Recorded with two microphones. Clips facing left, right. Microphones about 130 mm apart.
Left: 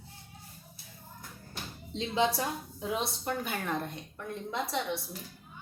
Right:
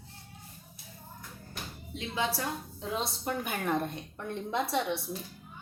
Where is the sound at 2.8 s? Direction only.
5° left (ahead or behind).